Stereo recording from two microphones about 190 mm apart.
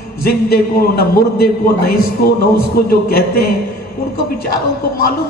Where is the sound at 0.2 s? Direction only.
55° left (ahead or behind).